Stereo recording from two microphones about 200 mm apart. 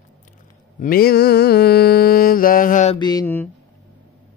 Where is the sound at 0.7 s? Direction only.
50° left (ahead or behind).